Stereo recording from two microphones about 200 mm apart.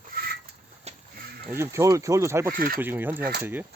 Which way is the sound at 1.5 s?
15° right (ahead or behind).